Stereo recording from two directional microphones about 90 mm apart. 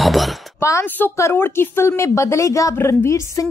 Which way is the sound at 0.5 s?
35° left (ahead or behind).